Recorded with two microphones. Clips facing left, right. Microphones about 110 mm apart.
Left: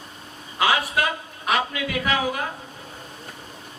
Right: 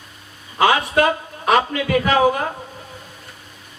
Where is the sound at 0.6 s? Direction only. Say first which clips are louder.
Right 6 dB; 40° right (ahead or behind).